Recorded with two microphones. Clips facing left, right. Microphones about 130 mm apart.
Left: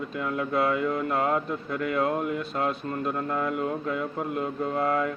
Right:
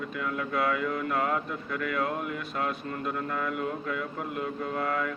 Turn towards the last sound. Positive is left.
turn(degrees=35)  # may be behind; listen again after turning